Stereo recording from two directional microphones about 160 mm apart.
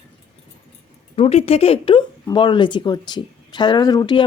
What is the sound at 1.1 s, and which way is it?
Speech, 40° left (ahead or behind).